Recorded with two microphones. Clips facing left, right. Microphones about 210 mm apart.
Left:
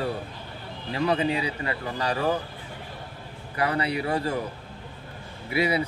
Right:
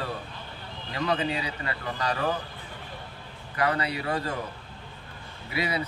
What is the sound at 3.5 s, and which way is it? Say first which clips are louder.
Speech: left 2 dB; 30° left (ahead or behind).